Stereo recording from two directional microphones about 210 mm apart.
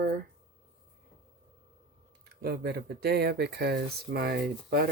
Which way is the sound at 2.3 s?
50° right (ahead or behind).